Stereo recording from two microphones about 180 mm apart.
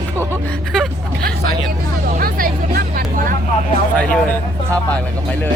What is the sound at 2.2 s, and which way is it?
Speech, 50° right (ahead or behind).